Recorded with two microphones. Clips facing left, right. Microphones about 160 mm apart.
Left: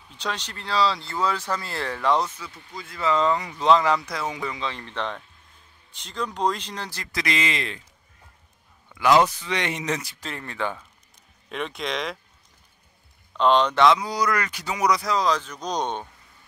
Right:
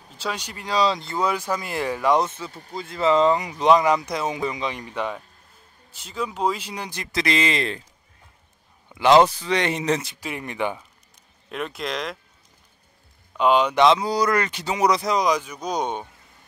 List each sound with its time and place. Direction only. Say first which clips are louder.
0.2 s speech: right 1 dB; 10° right (ahead or behind)
2.2 s speech: right 4 dB; 25° right (ahead or behind)
8.8 s a man's voice: right 3 dB; 25° right (ahead or behind)
10.2 s speech: right 3 dB; 15° right (ahead or behind)
11.4 s speech: right 1 dB; centre (ahead or behind)
13.4 s speech: right 1 dB; 10° right (ahead or behind)
13.8 s speech: right 2 dB; 30° right (ahead or behind); by 16.1 s 10° right (ahead or behind)